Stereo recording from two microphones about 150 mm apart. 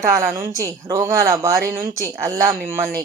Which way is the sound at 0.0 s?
20° right (ahead or behind).